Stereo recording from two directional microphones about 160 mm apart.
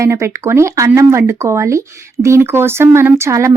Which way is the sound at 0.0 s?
20° right (ahead or behind).